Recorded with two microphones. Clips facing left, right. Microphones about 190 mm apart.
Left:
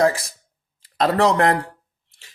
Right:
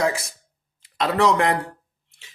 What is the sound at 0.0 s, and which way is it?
Speech, 35° left (ahead or behind).